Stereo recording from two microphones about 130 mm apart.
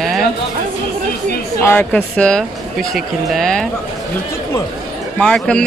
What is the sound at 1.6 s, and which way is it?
A man's voice, 15° left (ahead or behind).